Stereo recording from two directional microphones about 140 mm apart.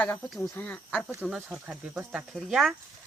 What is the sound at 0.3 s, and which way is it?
Speech, centre (ahead or behind).